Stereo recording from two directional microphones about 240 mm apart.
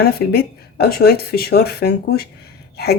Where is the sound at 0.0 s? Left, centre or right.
Left.